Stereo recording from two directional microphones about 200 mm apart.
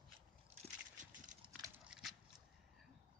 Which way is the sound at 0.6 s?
40° right (ahead or behind).